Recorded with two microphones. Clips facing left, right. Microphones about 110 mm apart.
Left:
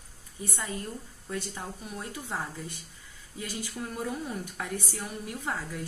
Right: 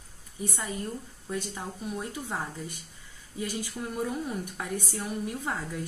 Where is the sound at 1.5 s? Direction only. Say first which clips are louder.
Right 3 dB; 15° right (ahead or behind).